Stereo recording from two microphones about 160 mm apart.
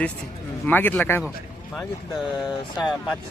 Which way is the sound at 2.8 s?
Centre (ahead or behind).